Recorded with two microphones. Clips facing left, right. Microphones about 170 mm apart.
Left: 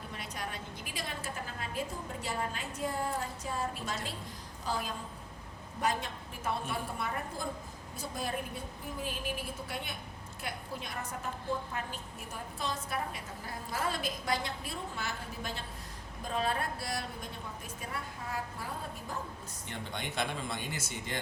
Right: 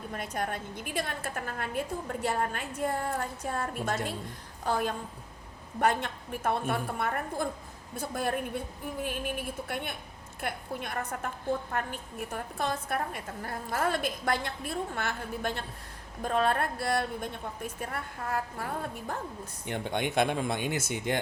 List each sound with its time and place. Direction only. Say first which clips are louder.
0.1 s a woman's voice: right 8 dB; 50° right (ahead or behind)
9.6 s a woman's voice: right 4 dB; 55° right (ahead or behind)